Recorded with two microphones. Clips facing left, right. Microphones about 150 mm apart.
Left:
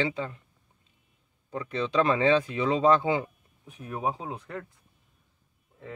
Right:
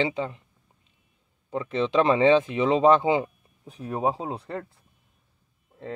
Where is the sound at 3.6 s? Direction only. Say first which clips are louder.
Right 5 dB; 35° right (ahead or behind).